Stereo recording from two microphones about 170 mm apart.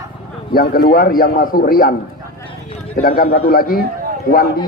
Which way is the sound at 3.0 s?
60° left (ahead or behind).